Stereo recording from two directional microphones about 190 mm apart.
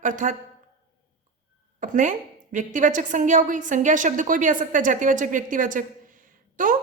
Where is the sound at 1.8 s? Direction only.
40° right (ahead or behind).